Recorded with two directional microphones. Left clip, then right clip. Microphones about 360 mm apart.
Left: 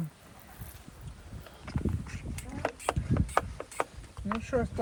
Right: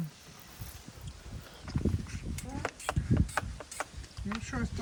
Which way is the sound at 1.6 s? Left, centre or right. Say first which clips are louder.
Right 1 dB; left.